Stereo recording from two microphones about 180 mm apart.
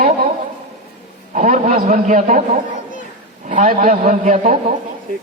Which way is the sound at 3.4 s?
45° right (ahead or behind).